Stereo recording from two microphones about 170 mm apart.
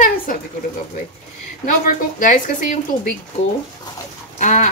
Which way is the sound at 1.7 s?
50° left (ahead or behind).